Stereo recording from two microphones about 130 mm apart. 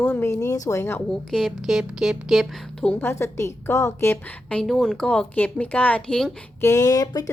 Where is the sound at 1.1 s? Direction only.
Centre (ahead or behind).